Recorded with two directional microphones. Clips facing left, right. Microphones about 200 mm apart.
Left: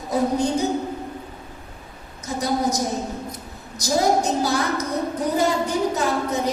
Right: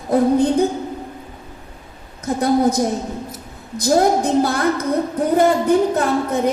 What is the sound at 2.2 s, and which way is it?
A woman's voice, 55° right (ahead or behind).